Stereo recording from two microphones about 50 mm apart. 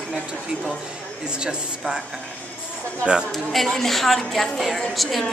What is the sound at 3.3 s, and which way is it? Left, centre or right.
A woman's voice, centre.